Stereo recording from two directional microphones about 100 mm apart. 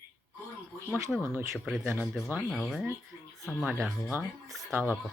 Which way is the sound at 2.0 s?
10° left (ahead or behind).